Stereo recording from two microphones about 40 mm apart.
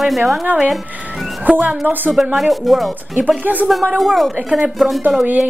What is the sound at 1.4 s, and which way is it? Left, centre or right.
Speech, right.